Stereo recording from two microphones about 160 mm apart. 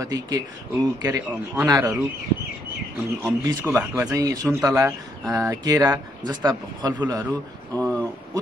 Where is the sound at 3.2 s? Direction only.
20° right (ahead or behind).